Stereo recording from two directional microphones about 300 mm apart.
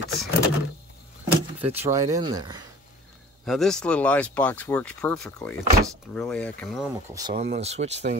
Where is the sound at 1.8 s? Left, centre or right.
Centre.